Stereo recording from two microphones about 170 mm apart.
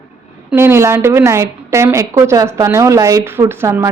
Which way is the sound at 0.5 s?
15° right (ahead or behind).